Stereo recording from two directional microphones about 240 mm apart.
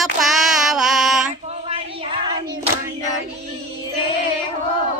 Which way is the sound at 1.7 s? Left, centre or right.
Right.